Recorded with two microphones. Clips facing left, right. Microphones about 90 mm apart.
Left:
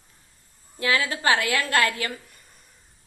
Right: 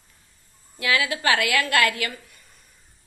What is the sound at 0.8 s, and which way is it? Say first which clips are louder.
A woman's voice: even; 30° left (ahead or behind).